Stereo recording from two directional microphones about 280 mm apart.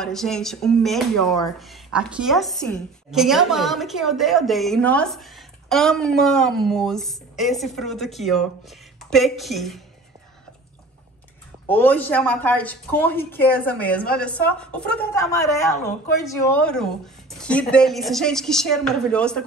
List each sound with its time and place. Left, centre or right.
0.0 s speech: centre
11.6 s speech: centre